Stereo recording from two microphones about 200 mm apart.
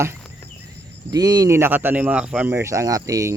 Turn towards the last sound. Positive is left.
turn(degrees=-15)  # may be behind; listen again after turning